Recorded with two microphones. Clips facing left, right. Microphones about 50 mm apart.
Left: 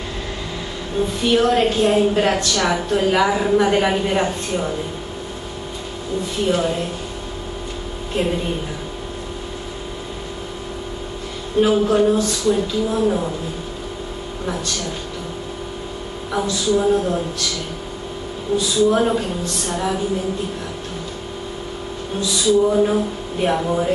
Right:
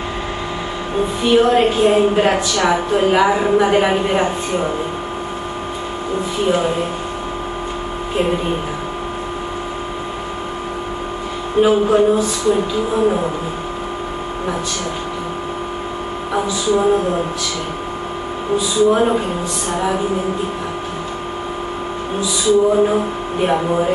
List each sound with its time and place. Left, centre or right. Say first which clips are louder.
0.9 s a woman's voice: right 3 dB; centre
6.4 s a woman's voice: right 2 dB; centre
11.6 s a woman's voice: right 3 dB; centre
16.3 s a woman's voice: right 2 dB; centre
18.6 s a woman's voice: right 2 dB; centre
22.2 s a woman's voice: right 2 dB; centre